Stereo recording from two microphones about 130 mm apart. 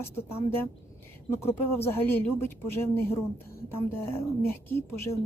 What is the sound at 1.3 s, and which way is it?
Speech, 20° left (ahead or behind).